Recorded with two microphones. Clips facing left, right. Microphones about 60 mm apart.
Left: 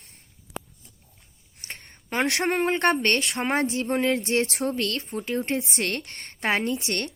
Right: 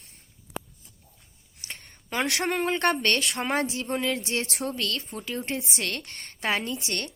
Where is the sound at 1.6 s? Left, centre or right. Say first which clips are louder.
Left 2 dB; left.